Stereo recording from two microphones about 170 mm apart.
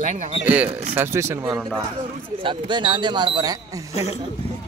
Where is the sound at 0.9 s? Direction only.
15° right (ahead or behind).